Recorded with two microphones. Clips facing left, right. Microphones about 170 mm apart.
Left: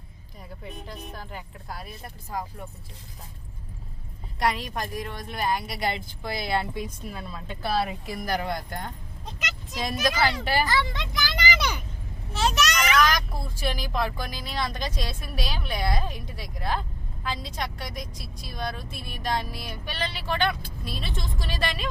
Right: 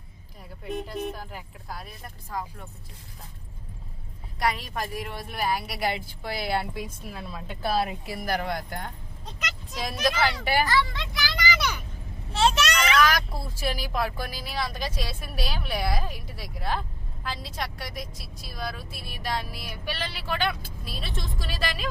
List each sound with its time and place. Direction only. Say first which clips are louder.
0.6 s a woman's voice: right 10 dB; 5° right (ahead or behind)
4.4 s a woman's voice: left 1 dB; centre (ahead or behind)
9.4 s vehicle: left 1 dB; centre (ahead or behind)
10.7 s speech: right 1 dB; 20° left (ahead or behind)
12.3 s a child's voice: right 2 dB; 30° right (ahead or behind)
13.0 s a woman's voice: even; 5° right (ahead or behind)